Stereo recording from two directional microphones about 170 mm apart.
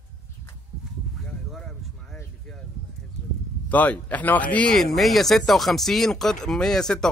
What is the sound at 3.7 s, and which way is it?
Speech, 10° left (ahead or behind).